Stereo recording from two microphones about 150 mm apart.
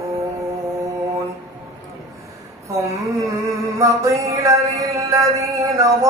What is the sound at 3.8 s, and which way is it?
Music, 20° right (ahead or behind).